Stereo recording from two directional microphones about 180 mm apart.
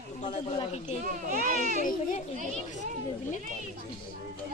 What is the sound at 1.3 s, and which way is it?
Speech, 45° right (ahead or behind).